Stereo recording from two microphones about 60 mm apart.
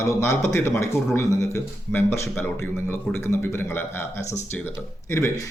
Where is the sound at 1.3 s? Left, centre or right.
Left.